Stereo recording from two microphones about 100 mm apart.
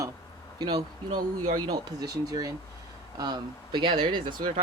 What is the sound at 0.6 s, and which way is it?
Speech, 45° right (ahead or behind).